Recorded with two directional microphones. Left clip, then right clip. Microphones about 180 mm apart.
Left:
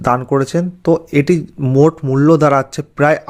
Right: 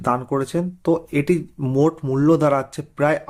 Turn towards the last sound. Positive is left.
turn(degrees=30)  # may be behind; listen again after turning